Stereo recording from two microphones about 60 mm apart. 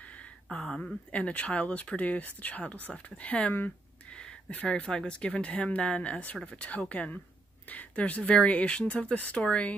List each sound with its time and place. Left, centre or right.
0.5 s speech: centre